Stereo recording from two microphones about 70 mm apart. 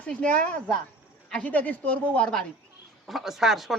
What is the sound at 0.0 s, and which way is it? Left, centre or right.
A woman's voice, centre.